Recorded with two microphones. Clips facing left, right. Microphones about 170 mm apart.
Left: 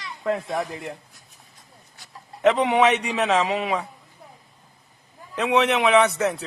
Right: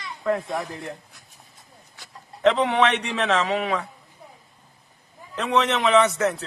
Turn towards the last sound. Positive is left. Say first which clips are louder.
# even
turn(degrees=10)  # may be behind; listen again after turning